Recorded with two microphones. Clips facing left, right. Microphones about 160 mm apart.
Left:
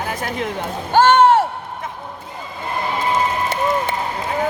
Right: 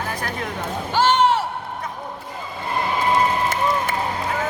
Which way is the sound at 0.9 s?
50° left (ahead or behind).